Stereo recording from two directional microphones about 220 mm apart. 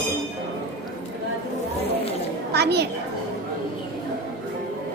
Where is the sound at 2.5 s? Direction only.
50° right (ahead or behind).